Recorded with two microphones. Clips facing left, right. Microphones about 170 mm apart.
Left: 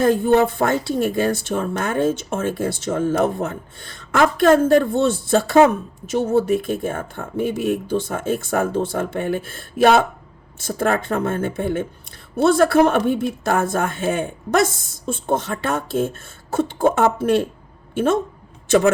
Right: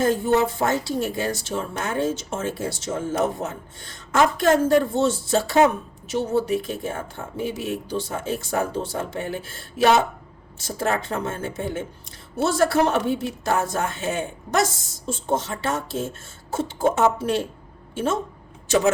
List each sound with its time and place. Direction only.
0.0 s speech: 60° left (ahead or behind)